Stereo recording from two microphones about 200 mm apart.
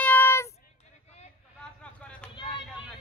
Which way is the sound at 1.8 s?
5° left (ahead or behind).